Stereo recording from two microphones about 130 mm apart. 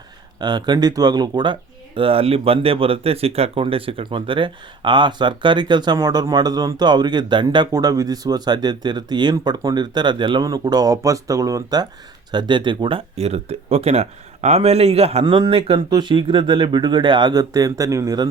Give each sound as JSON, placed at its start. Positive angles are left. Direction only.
{"t": 0.3, "sound": "speech", "side_deg": -35}
{"t": 2.0, "sound": "speech", "side_deg": -45}
{"t": 13.1, "sound": "speech", "side_deg": -55}
{"t": 15.2, "sound": "speech", "side_deg": -40}